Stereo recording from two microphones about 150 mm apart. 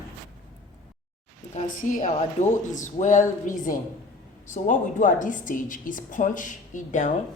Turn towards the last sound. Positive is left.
turn(degrees=55)  # may be behind; listen again after turning